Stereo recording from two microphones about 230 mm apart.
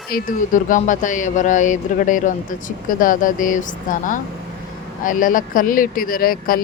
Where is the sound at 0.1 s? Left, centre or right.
Left.